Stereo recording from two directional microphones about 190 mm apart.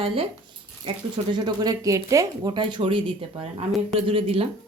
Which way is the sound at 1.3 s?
20° right (ahead or behind).